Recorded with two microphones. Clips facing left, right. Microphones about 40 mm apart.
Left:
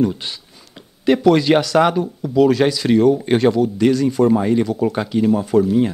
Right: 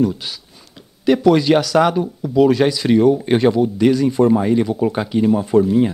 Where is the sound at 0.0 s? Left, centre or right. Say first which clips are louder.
Even; centre.